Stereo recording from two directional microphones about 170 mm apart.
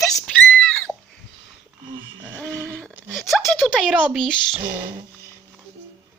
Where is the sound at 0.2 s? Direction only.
Centre (ahead or behind).